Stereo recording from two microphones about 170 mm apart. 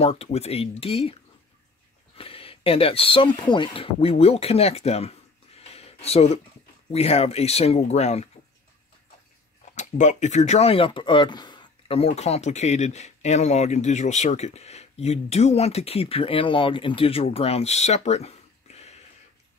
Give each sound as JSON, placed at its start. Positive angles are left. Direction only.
{"t": 0.0, "sound": "speech", "side_deg": 40}
{"t": 2.1, "sound": "speech", "side_deg": 35}
{"t": 5.6, "sound": "a sound", "side_deg": 35}
{"t": 6.9, "sound": "speech", "side_deg": 35}
{"t": 9.8, "sound": "speech", "side_deg": 45}